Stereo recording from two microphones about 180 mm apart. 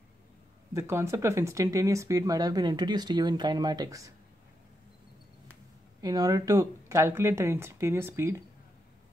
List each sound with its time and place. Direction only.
0.7 s speech: 15° right (ahead or behind)
5.9 s speech: 20° right (ahead or behind)